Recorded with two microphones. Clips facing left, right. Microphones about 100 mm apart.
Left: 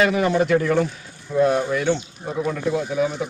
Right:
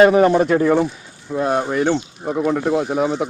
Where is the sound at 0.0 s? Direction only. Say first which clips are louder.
Right 7 dB; 40° right (ahead or behind).